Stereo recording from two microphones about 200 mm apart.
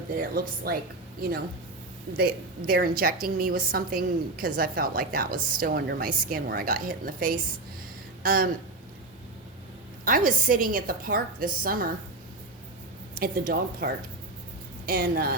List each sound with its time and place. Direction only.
0.1 s a woman's voice: 45° right (ahead or behind)
2.1 s a woman's voice: 50° right (ahead or behind)
8.2 s a sound: 45° right (ahead or behind)
10.0 s a woman's voice: 45° right (ahead or behind)
13.1 s a woman's voice: 45° right (ahead or behind)